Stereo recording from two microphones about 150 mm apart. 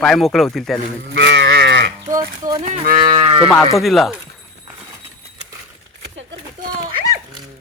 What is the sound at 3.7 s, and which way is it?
Speech, centre (ahead or behind).